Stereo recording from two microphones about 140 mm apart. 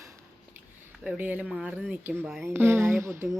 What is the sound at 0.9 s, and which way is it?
A woman's voice, 10° right (ahead or behind).